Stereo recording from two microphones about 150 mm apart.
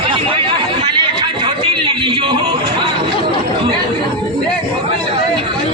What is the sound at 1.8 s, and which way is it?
Speech, 35° right (ahead or behind).